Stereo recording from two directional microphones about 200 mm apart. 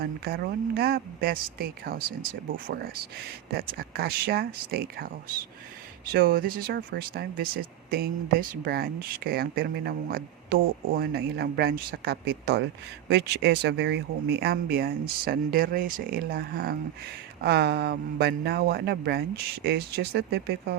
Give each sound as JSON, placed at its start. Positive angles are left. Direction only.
{"t": 0.0, "sound": "speech", "side_deg": -50}